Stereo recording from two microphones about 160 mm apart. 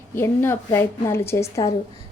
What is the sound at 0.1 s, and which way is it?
A woman's voice, 15° left (ahead or behind).